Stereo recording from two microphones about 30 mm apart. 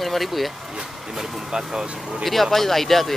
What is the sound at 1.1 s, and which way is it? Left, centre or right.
Speech, centre.